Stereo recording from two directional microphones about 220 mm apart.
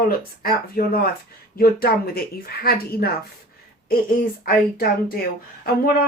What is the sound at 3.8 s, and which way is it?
A woman's voice, 40° left (ahead or behind).